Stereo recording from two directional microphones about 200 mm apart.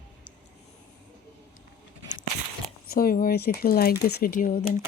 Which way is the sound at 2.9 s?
45° left (ahead or behind).